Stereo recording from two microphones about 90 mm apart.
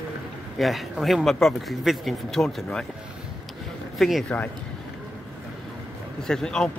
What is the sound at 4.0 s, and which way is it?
Speech, centre (ahead or behind).